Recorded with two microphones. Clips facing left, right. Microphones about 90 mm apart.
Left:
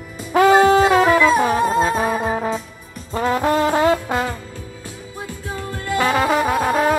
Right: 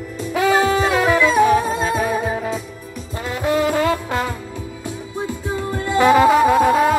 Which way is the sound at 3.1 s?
50° left (ahead or behind).